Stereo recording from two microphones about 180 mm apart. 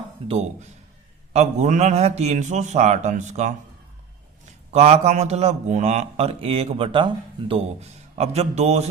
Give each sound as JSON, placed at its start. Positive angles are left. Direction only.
{"t": 0.3, "sound": "a man's voice", "side_deg": -35}
{"t": 4.7, "sound": "a man's voice", "side_deg": -35}